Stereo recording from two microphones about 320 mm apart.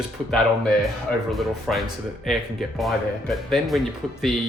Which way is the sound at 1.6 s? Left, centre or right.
Centre.